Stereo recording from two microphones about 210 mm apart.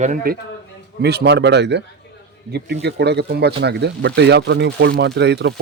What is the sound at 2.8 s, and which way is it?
A man's voice, 50° right (ahead or behind).